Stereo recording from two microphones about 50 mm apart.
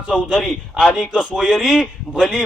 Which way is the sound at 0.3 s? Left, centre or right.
Centre.